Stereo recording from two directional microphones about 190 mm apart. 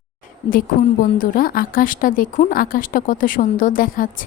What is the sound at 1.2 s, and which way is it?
A woman's voice, 50° left (ahead or behind).